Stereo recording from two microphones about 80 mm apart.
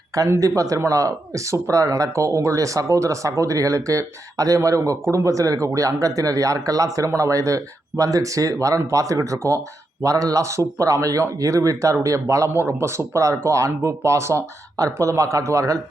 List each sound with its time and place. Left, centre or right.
0.1 s speech: right